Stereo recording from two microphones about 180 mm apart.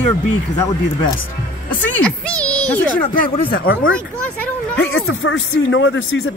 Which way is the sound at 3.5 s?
55° left (ahead or behind).